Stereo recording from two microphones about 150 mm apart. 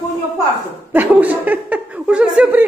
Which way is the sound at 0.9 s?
10° right (ahead or behind).